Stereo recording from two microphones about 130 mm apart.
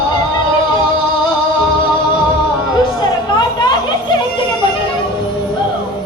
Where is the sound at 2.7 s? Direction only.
35° left (ahead or behind).